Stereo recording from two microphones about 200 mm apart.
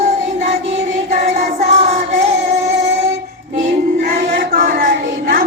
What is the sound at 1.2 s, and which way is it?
Child singing, 35° right (ahead or behind).